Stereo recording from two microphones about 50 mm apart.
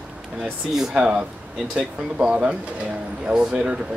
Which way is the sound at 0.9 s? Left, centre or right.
Right.